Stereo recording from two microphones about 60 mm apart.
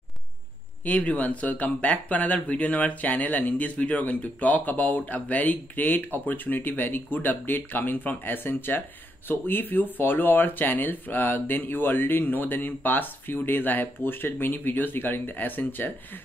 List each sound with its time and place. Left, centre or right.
0.8 s speech: left